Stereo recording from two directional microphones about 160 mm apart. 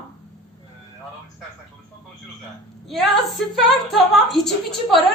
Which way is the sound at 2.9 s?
Centre (ahead or behind).